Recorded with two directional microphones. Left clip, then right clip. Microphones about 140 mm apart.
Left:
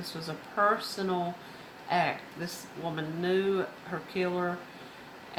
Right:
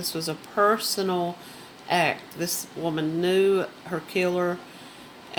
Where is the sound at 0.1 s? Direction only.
90° right.